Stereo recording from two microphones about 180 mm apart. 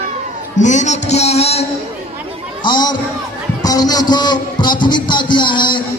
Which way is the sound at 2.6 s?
25° left (ahead or behind).